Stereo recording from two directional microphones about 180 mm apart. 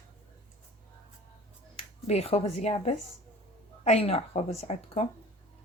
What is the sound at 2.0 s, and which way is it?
Speech, 35° left (ahead or behind).